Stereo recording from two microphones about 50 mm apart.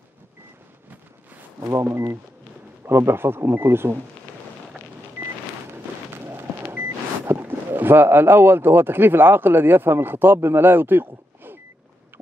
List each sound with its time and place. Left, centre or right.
1.9 s speech: right
6.6 s speech: right